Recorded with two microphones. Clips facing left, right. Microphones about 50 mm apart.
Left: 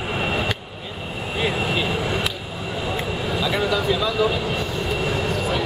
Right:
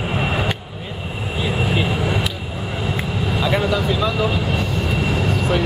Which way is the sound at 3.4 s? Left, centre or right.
Right.